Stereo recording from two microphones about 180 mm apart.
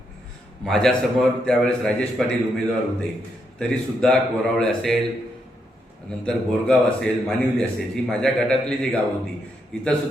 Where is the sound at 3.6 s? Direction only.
5° left (ahead or behind).